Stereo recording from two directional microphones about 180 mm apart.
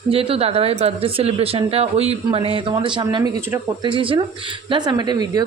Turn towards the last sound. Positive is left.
turn(degrees=-20)  # may be behind; listen again after turning